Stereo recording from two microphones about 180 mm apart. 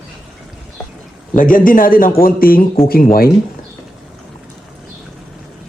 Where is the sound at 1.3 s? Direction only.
50° left (ahead or behind).